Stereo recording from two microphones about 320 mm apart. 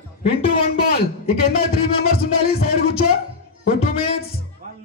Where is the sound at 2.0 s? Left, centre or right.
Left.